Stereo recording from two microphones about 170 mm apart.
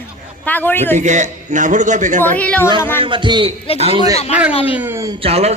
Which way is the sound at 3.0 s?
30° right (ahead or behind).